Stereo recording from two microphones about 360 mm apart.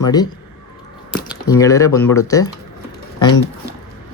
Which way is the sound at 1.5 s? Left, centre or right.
Centre.